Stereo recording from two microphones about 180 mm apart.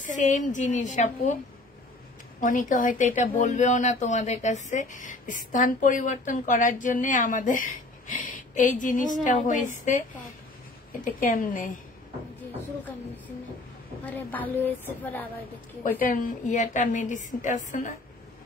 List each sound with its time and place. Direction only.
0.0 s speech: 45° left (ahead or behind)
2.4 s speech: 45° left (ahead or behind)
11.1 s speech: 50° left (ahead or behind)
14.0 s a woman's voice: 10° left (ahead or behind)
15.8 s speech: 50° left (ahead or behind)